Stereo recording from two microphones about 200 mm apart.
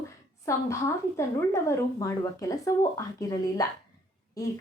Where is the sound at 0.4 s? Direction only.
15° left (ahead or behind).